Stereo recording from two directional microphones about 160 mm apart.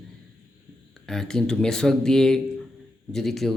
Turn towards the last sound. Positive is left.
turn(degrees=0)  # may be behind; listen again after turning